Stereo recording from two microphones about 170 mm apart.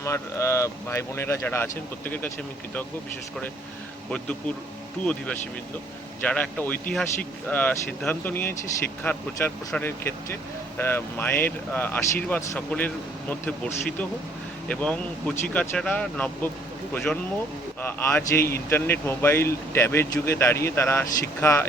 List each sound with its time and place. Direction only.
0.0 s speech: 15° left (ahead or behind)
4.1 s speech: 5° left (ahead or behind)
14.7 s speech: 10° left (ahead or behind)